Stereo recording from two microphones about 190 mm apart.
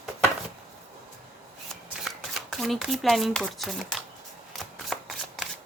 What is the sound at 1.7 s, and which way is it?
Shuffling cards, centre (ahead or behind).